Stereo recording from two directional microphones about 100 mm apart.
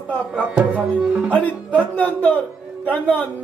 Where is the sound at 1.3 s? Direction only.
15° left (ahead or behind).